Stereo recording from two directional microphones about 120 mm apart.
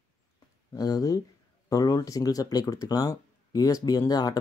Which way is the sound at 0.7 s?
30° left (ahead or behind).